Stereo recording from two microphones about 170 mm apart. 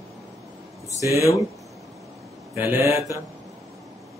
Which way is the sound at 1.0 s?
20° right (ahead or behind).